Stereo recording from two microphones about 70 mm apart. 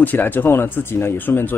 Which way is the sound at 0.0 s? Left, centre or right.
Left.